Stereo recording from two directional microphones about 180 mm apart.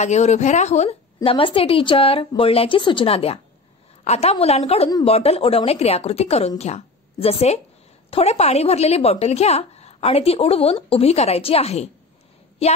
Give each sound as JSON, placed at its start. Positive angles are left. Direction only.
{"t": 0.0, "sound": "a woman's voice", "side_deg": 40}